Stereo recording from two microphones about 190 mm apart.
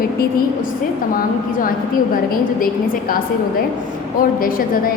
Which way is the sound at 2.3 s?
50° left (ahead or behind).